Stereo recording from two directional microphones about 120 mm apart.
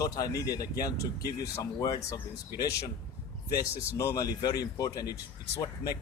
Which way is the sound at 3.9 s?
30° left (ahead or behind).